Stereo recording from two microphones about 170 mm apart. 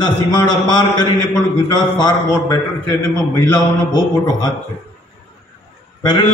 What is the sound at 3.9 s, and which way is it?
Speech, 25° left (ahead or behind).